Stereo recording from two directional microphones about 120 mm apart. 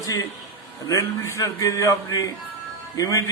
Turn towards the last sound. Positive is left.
turn(degrees=30)  # may be behind; listen again after turning